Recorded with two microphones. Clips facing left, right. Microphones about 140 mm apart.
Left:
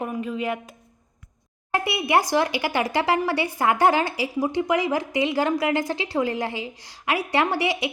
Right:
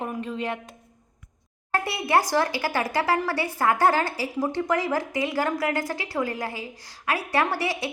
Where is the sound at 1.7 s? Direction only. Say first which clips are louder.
Left 1 dB; 15° left (ahead or behind).